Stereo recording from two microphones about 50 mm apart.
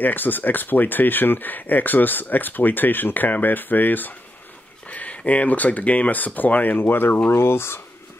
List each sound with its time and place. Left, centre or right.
0.0 s speech: left